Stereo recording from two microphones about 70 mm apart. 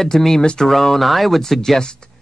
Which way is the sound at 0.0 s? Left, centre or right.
Centre.